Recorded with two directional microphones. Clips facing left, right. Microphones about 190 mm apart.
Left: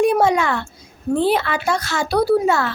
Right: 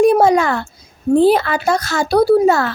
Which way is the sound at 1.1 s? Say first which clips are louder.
Right 6 dB; 40° right (ahead or behind).